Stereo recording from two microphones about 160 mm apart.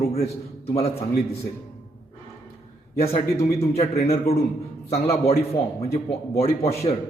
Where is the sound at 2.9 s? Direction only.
40° left (ahead or behind).